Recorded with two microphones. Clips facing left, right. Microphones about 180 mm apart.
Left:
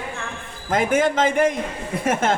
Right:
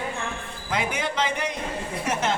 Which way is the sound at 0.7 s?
45° left (ahead or behind).